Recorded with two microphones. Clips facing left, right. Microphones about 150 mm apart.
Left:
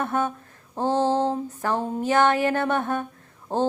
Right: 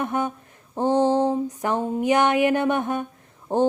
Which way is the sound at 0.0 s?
15° right (ahead or behind).